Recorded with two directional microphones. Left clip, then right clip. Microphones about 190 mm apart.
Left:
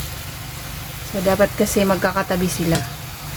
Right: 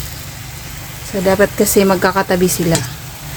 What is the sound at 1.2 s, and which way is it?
Speech, 45° right (ahead or behind).